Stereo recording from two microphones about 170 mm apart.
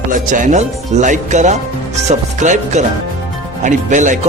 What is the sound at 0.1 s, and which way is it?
Speech, 50° right (ahead or behind).